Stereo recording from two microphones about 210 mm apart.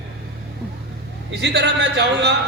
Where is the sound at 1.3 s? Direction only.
55° right (ahead or behind).